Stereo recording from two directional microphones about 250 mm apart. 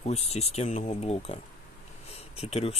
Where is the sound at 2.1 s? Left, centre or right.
Left.